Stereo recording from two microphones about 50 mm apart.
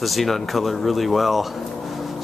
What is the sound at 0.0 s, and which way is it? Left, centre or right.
Speech, centre.